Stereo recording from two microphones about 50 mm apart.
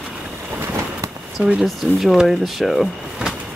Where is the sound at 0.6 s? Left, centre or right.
Right.